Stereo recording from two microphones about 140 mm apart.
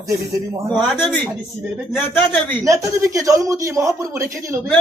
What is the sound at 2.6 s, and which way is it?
Speech, 20° right (ahead or behind).